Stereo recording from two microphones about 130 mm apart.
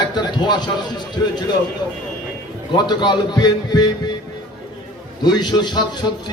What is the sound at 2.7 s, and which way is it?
A man's voice, 35° left (ahead or behind).